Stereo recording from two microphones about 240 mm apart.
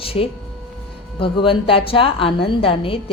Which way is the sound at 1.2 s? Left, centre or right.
Left.